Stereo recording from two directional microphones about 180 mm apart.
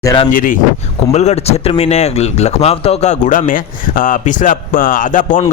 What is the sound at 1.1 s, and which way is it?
A man's voice, 35° left (ahead or behind).